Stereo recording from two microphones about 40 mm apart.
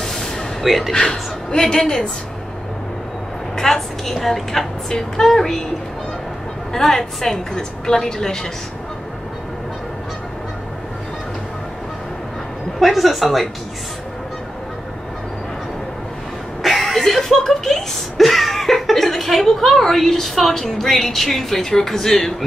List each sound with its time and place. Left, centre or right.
0.0 s a sound: centre
0.7 s a woman's voice: centre
1.5 s a woman's voice: centre
3.5 s a woman's voice: centre
6.7 s a woman's voice: centre
12.7 s a woman's voice: centre
16.6 s speech: centre